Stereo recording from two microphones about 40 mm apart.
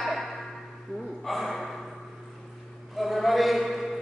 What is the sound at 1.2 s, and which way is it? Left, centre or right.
Speech, centre.